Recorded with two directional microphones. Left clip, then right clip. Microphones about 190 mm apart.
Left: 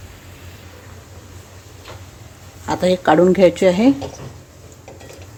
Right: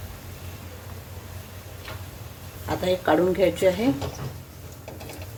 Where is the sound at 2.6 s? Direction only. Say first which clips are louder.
Left 8 dB; 60° left (ahead or behind).